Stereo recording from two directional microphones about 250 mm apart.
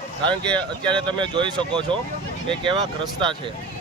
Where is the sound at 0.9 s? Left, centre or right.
Centre.